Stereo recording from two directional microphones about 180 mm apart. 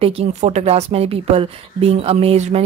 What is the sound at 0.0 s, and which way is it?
Speech, 35° right (ahead or behind).